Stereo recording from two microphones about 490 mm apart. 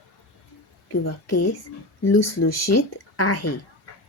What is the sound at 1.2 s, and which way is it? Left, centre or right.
Speech, left.